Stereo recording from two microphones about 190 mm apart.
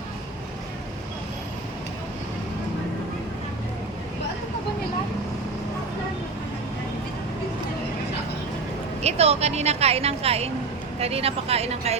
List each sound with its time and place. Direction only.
9.0 s speech: 35° right (ahead or behind)